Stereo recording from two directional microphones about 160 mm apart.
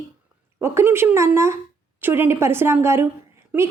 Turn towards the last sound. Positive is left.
turn(degrees=-10)  # may be behind; listen again after turning